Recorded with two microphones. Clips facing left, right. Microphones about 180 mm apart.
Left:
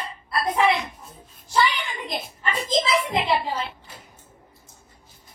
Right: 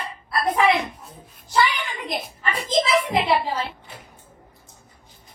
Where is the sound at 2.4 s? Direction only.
10° right (ahead or behind).